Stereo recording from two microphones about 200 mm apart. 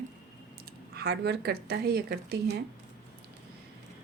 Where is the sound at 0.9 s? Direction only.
50° right (ahead or behind).